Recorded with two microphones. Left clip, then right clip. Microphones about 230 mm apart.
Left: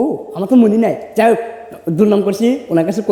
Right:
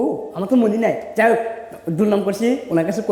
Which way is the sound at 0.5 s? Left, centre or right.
Left.